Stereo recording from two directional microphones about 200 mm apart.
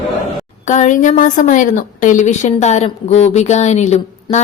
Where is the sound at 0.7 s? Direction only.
40° left (ahead or behind).